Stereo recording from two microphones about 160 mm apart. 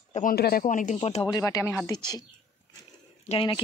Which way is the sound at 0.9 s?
40° left (ahead or behind).